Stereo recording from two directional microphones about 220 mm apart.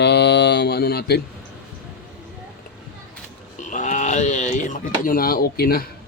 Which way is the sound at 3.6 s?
35° left (ahead or behind).